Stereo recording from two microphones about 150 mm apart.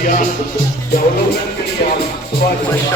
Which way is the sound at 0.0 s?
65° left (ahead or behind).